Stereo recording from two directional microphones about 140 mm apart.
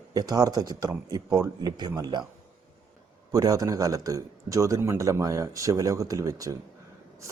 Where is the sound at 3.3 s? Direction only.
25° right (ahead or behind).